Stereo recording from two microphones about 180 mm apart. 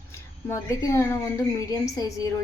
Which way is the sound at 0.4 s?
15° left (ahead or behind).